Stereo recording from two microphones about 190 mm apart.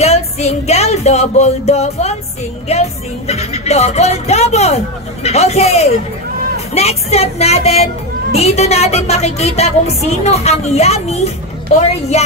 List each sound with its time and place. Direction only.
0.0 s music: 35° left (ahead or behind)
2.7 s speech: 35° left (ahead or behind)